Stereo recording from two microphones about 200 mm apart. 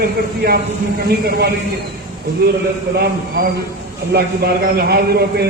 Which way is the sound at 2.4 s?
50° right (ahead or behind).